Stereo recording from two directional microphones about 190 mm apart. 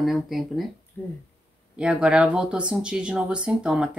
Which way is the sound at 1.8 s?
5° right (ahead or behind).